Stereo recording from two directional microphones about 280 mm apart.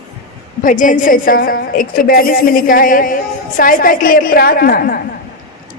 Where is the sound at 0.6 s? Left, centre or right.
Left.